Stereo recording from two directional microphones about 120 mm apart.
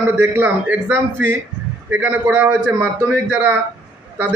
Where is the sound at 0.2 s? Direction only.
15° right (ahead or behind).